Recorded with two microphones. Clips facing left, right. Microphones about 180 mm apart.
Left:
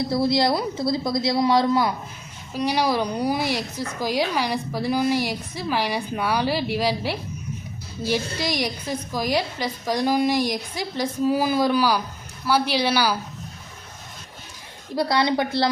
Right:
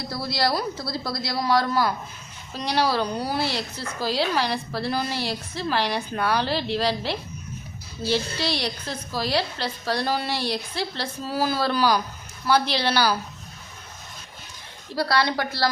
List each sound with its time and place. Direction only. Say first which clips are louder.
0.1 s a woman's voice: left 3 dB; 25° left (ahead or behind)
14.9 s a woman's voice: left 2 dB; 20° left (ahead or behind)